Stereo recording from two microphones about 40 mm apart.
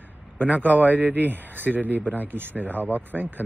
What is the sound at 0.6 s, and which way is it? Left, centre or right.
Speech, right.